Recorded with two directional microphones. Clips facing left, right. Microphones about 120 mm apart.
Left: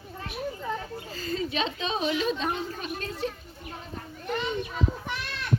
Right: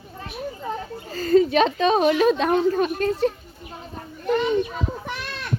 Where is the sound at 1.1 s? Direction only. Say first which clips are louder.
Right 14 dB; 50° right (ahead or behind).